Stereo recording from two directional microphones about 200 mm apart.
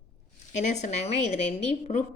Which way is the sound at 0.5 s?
35° left (ahead or behind).